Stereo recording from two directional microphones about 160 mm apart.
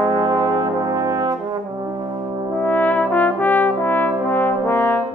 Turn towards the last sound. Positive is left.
turn(degrees=15)  # may be behind; listen again after turning